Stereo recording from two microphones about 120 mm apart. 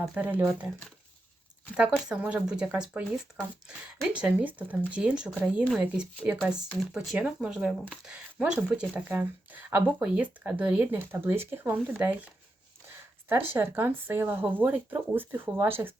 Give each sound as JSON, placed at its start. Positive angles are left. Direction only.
{"t": 0.2, "sound": "speech", "side_deg": -15}
{"t": 1.7, "sound": "speech", "side_deg": -10}
{"t": 13.5, "sound": "speech", "side_deg": -20}